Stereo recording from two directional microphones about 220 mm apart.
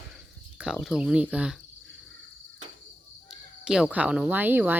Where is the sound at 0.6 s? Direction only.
5° right (ahead or behind).